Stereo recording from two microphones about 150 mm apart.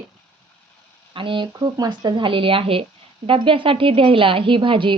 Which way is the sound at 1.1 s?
35° right (ahead or behind).